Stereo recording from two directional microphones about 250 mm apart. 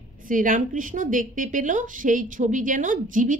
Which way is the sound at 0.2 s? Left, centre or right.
Right.